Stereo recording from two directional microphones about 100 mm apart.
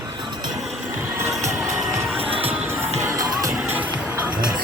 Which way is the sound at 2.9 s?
35° right (ahead or behind).